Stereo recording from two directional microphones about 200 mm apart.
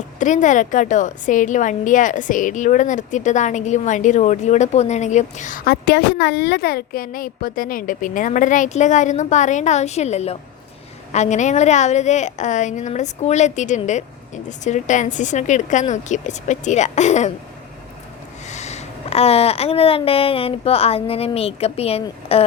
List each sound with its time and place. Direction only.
0.2 s a woman's voice: 40° left (ahead or behind)
18.4 s a sound: 35° left (ahead or behind)
22.0 s a woman's voice: 30° left (ahead or behind)